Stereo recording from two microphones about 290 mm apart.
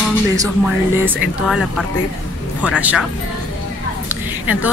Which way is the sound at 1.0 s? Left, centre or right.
Centre.